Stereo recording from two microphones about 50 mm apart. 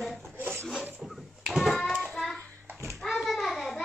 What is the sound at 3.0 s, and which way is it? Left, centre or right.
Hands, centre.